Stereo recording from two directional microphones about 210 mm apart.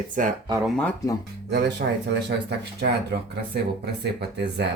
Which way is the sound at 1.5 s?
50° right (ahead or behind).